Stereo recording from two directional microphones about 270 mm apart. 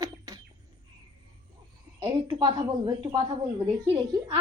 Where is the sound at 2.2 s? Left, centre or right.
Centre.